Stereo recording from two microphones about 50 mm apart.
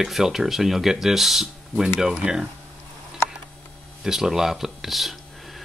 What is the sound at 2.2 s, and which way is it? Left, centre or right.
Speech, centre.